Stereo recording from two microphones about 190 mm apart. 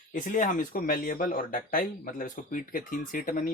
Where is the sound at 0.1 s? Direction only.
45° left (ahead or behind).